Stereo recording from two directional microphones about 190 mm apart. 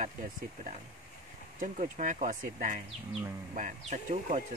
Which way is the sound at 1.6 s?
45° right (ahead or behind).